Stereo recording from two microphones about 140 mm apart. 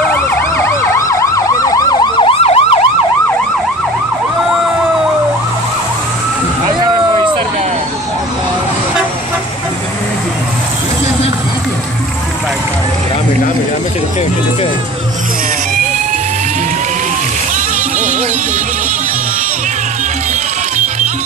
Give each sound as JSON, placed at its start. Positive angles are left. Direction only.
{"t": 0.0, "sound": "emergency vehicle", "side_deg": 15}